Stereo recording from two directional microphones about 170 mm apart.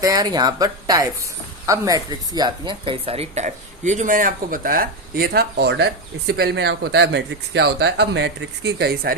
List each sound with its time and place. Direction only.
0.0 s speech: 20° right (ahead or behind); by 9.1 s 65° right (ahead or behind)